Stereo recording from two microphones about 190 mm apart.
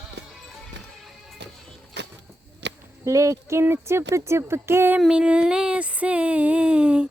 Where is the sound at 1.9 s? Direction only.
65° right (ahead or behind).